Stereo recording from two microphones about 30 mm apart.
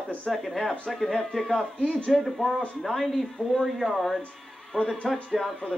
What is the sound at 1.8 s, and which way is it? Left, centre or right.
Speech, left.